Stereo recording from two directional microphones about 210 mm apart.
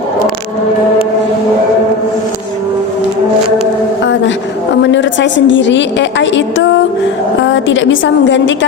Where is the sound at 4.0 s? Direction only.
60° left (ahead or behind).